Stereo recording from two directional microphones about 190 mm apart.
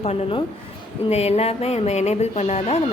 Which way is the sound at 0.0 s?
35° left (ahead or behind).